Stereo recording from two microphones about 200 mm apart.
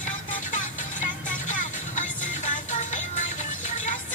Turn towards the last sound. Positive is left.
turn(degrees=40)  # may be behind; listen again after turning